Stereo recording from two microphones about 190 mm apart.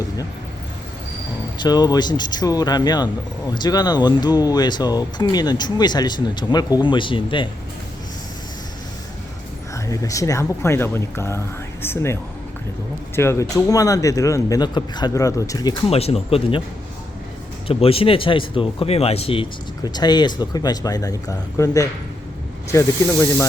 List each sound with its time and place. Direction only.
1.5 s speech: 20° left (ahead or behind)
9.7 s a man's voice: 15° left (ahead or behind)
15.9 s speech: 30° left (ahead or behind)
17.7 s a man's voice: 30° left (ahead or behind)